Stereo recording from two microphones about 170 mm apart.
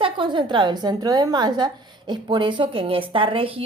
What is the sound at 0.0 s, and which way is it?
A woman's voice, 30° right (ahead or behind).